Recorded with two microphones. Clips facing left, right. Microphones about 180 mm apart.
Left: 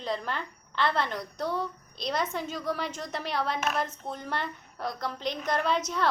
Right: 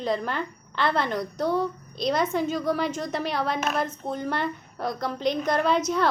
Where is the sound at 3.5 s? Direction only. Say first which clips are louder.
Right 3 dB; 45° right (ahead or behind).